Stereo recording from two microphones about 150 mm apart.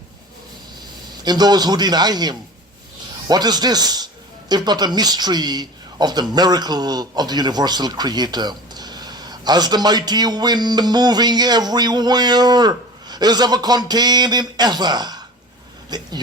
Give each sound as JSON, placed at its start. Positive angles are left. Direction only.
{"t": 1.2, "sound": "speech", "side_deg": -25}